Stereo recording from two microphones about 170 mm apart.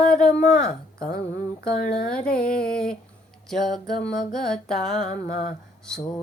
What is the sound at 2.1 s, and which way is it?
Speech, 5° left (ahead or behind).